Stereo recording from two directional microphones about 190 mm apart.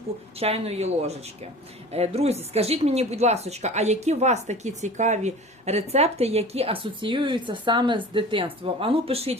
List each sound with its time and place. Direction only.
0.3 s a woman's voice: 30° right (ahead or behind)